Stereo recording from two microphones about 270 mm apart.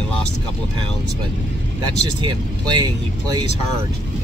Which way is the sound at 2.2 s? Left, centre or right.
Centre.